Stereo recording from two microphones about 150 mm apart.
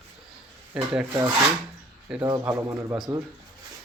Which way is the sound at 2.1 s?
5° right (ahead or behind).